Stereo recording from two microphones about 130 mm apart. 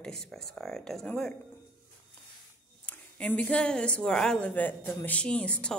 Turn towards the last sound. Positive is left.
turn(degrees=10)  # may be behind; listen again after turning